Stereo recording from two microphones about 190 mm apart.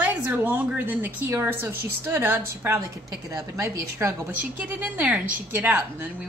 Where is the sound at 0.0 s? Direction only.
10° right (ahead or behind).